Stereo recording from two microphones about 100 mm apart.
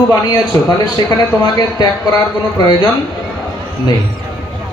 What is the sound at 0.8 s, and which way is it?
Speech, 45° left (ahead or behind).